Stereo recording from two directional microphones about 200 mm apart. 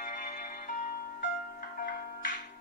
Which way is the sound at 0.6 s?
40° left (ahead or behind).